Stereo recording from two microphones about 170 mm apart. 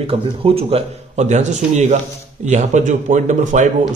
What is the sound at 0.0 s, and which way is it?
A man's voice, 35° right (ahead or behind).